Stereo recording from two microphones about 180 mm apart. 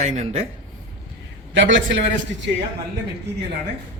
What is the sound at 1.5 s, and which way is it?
Speech, 90° right.